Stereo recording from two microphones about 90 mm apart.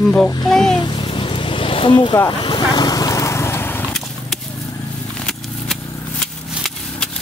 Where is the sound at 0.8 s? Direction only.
60° left (ahead or behind).